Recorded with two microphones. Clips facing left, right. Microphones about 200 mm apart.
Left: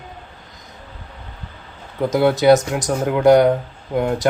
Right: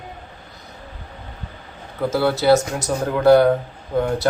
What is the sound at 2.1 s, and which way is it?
Speech, 15° left (ahead or behind).